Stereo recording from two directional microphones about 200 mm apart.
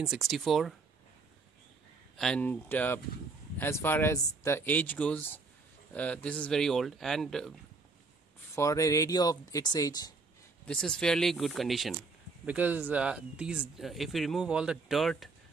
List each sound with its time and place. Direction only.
0.0 s speech: centre (ahead or behind)
2.1 s speech: 5° left (ahead or behind)
8.5 s speech: 15° left (ahead or behind)
10.7 s speech: 5° left (ahead or behind)